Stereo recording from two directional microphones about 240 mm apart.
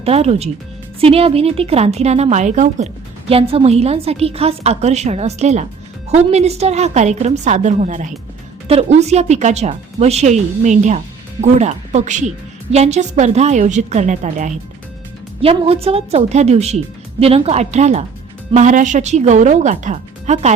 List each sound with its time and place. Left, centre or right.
0.0 s a woman's voice: right